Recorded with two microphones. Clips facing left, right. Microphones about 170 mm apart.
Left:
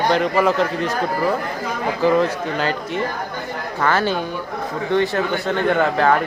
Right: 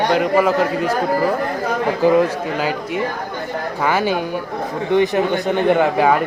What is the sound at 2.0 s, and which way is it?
Speech, 10° right (ahead or behind).